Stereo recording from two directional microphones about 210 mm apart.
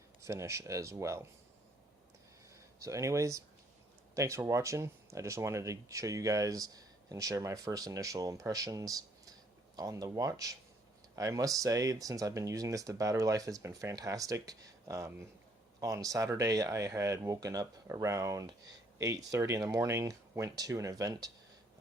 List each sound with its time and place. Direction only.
0.2 s speech: 15° right (ahead or behind)
2.8 s speech: 15° right (ahead or behind)